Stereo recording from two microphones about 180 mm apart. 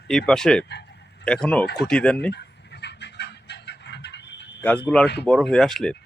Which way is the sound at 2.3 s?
70° left (ahead or behind).